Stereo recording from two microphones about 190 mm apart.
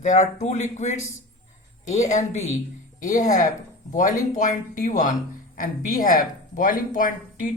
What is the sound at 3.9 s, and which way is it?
A man's voice, 45° left (ahead or behind).